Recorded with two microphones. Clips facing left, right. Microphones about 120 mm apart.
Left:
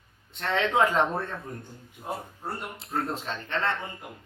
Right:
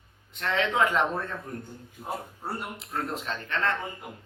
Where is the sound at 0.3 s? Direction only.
30° left (ahead or behind).